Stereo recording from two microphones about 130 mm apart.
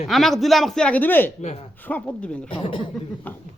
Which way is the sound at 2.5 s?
45° left (ahead or behind).